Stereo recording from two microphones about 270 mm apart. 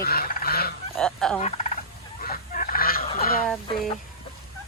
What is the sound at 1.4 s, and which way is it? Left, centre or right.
Gobble, left.